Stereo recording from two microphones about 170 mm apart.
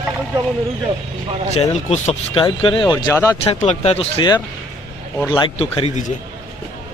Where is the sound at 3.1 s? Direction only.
15° left (ahead or behind).